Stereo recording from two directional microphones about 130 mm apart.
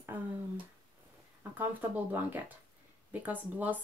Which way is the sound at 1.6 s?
15° right (ahead or behind).